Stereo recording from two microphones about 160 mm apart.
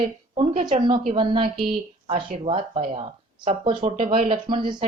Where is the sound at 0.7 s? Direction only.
45° right (ahead or behind).